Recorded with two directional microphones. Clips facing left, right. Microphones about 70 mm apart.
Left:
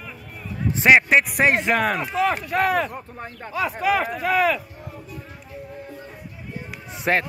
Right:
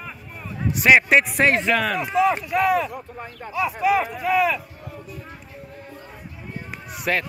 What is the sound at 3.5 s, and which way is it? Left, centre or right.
Speech, left.